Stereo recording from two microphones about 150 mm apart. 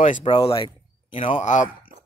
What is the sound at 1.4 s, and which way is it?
Speech, 55° left (ahead or behind).